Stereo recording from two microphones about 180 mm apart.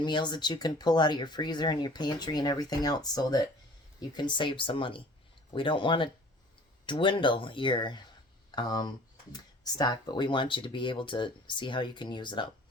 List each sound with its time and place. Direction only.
0.0 s speech: 25° left (ahead or behind)